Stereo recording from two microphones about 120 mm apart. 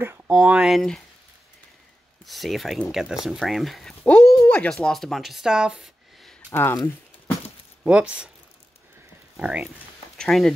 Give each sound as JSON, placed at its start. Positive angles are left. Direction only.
{"t": 0.0, "sound": "a sound", "side_deg": -20}
{"t": 0.6, "sound": "speech", "side_deg": 0}
{"t": 2.2, "sound": "speech", "side_deg": 0}
{"t": 4.0, "sound": "a sound", "side_deg": 20}
{"t": 4.6, "sound": "speech", "side_deg": 5}
{"t": 6.5, "sound": "speech", "side_deg": 20}
{"t": 7.8, "sound": "speech", "side_deg": -10}
{"t": 9.4, "sound": "speech", "side_deg": -10}
{"t": 10.1, "sound": "speech", "side_deg": 5}